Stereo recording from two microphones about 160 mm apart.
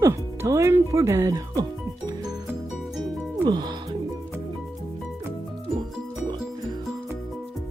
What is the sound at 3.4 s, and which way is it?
Music, 25° right (ahead or behind).